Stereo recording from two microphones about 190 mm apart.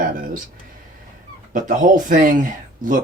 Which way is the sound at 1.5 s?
45° right (ahead or behind).